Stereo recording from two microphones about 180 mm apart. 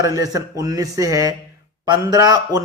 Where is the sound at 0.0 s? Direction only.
20° right (ahead or behind).